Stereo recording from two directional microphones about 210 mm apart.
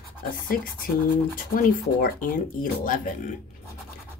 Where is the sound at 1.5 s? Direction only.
45° left (ahead or behind).